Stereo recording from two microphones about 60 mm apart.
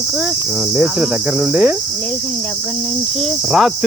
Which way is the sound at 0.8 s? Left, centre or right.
Centre.